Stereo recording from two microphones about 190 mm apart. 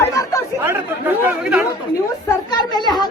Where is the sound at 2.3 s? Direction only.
20° left (ahead or behind).